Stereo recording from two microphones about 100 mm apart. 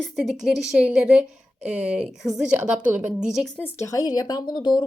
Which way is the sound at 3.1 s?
5° right (ahead or behind).